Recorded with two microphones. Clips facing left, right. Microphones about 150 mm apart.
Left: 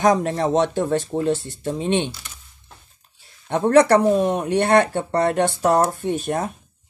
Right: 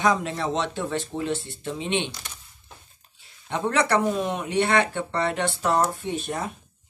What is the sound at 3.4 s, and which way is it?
Speech, 50° left (ahead or behind).